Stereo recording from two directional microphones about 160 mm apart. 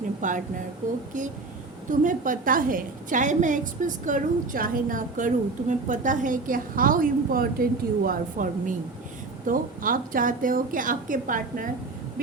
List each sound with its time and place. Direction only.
0.2 s speech: 55° right (ahead or behind)
1.9 s a woman's voice: 55° right (ahead or behind)